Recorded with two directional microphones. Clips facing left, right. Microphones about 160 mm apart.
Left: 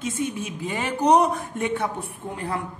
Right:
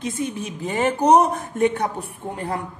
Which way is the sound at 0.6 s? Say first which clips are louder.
Right 4 dB; 45° right (ahead or behind).